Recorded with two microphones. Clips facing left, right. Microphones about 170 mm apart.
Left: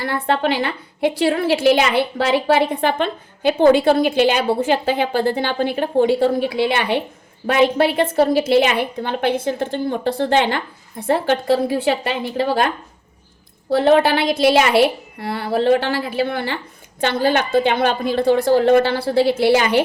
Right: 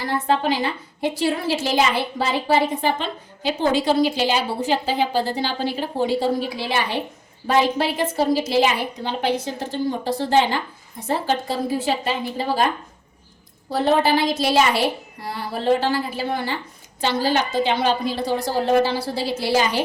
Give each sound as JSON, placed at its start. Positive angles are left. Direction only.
{"t": 0.0, "sound": "a woman's voice", "side_deg": 65}
{"t": 13.7, "sound": "a woman's voice", "side_deg": 65}